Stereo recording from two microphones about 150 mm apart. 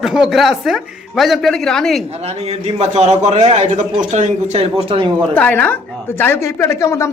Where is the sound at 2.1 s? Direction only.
45° right (ahead or behind).